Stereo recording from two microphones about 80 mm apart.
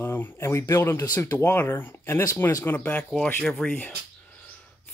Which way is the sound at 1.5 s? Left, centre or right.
Left.